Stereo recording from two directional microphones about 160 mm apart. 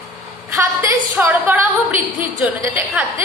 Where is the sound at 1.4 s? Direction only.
10° right (ahead or behind).